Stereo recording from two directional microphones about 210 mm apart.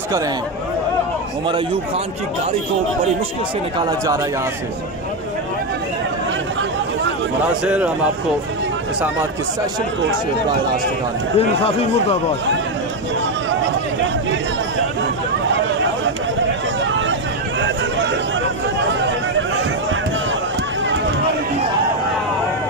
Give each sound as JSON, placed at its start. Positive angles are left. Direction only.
{"t": 7.6, "sound": "a man's voice", "side_deg": -5}
{"t": 11.3, "sound": "speech", "side_deg": 30}
{"t": 18.9, "sound": "chatter", "side_deg": -60}